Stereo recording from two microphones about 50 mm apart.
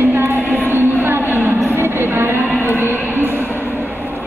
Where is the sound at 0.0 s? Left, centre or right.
Right.